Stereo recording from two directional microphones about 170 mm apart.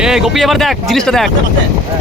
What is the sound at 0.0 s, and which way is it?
Speech, 5° right (ahead or behind).